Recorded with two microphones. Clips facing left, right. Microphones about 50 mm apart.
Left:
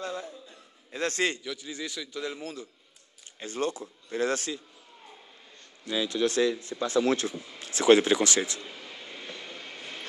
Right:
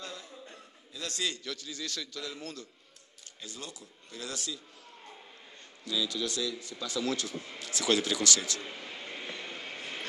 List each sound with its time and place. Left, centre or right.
0.0 s a sound: left
0.9 s speech: left
1.4 s a man's voice: centre
3.3 s speech: left
5.9 s speech: left
8.6 s vehicle: centre